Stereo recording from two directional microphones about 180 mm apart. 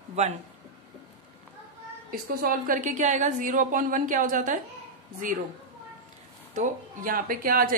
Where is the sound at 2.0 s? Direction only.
50° right (ahead or behind).